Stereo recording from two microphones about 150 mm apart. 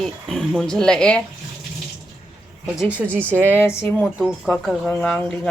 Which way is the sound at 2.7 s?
10° right (ahead or behind).